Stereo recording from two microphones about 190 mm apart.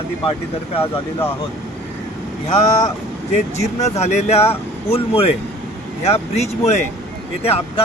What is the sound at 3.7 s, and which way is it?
Speech, 35° left (ahead or behind).